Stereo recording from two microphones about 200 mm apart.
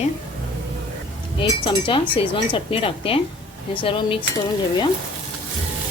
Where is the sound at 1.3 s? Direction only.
25° left (ahead or behind).